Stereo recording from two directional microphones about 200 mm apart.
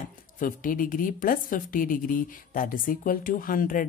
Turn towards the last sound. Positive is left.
turn(degrees=45)  # may be behind; listen again after turning